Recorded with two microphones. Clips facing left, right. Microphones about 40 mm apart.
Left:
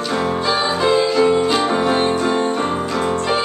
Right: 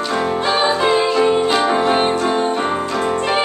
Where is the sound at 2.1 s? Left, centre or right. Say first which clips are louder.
Even; centre.